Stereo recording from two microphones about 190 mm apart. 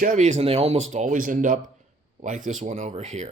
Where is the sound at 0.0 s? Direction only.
40° right (ahead or behind).